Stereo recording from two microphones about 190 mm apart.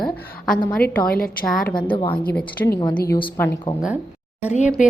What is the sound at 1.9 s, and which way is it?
Speech, 25° left (ahead or behind).